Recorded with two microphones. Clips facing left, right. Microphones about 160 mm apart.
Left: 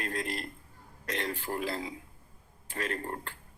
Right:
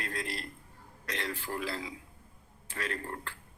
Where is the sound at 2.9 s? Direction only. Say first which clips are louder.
Left 3 dB; 35° left (ahead or behind).